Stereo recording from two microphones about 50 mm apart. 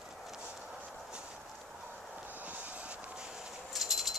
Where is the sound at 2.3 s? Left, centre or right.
Right.